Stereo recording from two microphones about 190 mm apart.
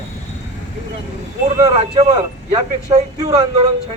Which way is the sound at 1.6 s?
30° right (ahead or behind).